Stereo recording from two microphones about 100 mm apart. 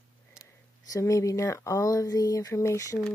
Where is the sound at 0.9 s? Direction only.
35° left (ahead or behind).